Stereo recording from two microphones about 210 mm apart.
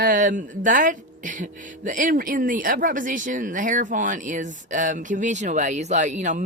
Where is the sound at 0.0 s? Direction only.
40° right (ahead or behind).